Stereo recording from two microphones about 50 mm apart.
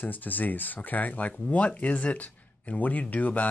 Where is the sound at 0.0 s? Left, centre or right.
Left.